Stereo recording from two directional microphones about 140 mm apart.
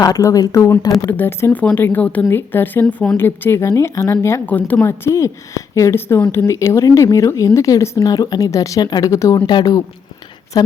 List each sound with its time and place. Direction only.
0.0 s a woman's voice: 25° left (ahead or behind)
2.8 s speech: 5° left (ahead or behind)
3.2 s speech: 15° left (ahead or behind)